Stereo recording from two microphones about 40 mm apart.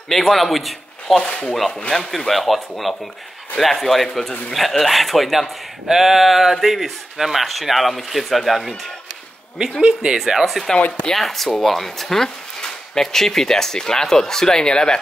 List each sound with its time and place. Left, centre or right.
0.2 s speech: centre
1.2 s speech: left
1.9 s speech: centre
2.1 s speech: centre
9.8 s speech: right
10.1 s speech: centre
11.1 s speech: centre